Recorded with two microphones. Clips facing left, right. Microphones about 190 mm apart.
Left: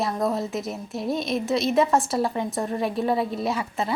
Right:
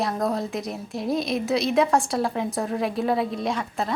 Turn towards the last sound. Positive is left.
turn(degrees=5)  # may be behind; listen again after turning